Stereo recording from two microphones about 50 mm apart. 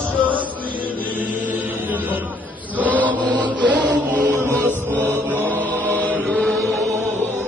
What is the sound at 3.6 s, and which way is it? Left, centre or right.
Music, right.